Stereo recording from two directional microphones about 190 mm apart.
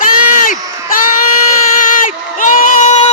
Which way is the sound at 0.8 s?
45° left (ahead or behind).